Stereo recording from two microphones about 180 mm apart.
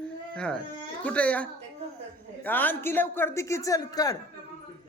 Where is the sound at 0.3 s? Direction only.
5° left (ahead or behind).